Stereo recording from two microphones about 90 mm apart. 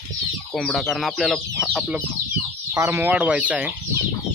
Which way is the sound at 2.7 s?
35° right (ahead or behind).